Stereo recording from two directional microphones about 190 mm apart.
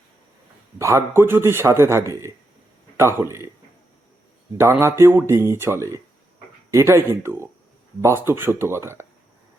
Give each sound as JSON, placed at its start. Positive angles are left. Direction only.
{"t": 0.8, "sound": "a man's voice", "side_deg": -15}
{"t": 4.5, "sound": "a man's voice", "side_deg": -15}